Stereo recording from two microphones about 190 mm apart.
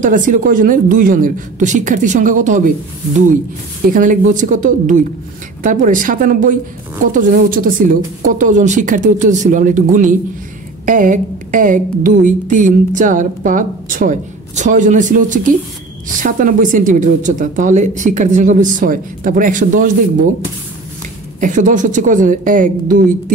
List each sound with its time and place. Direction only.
0.0 s speech: 45° right (ahead or behind)
3.9 s speech: 45° right (ahead or behind)
21.4 s speech: 40° right (ahead or behind)